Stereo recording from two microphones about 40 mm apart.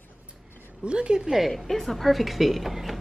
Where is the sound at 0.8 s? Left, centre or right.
Right.